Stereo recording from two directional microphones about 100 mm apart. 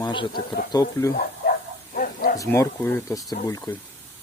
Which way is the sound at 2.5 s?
20° left (ahead or behind).